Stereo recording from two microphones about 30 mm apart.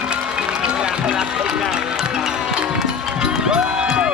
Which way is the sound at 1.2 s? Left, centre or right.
Centre.